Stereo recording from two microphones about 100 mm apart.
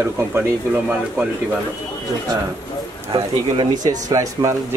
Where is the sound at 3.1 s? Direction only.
55° right (ahead or behind).